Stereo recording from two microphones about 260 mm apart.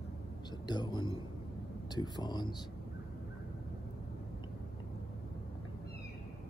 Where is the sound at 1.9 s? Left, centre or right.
Centre.